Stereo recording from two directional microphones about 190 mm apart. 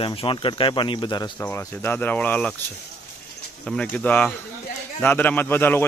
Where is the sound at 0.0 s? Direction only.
25° left (ahead or behind); by 2.5 s 10° left (ahead or behind).